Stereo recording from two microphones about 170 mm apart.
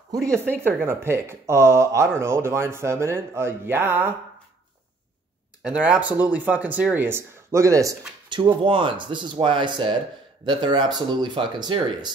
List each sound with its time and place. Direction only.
0.7 s speech: 15° right (ahead or behind)
5.6 s speech: 5° right (ahead or behind)
8.3 s speech: 30° right (ahead or behind)